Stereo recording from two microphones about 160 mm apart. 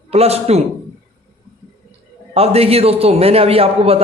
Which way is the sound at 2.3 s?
40° right (ahead or behind).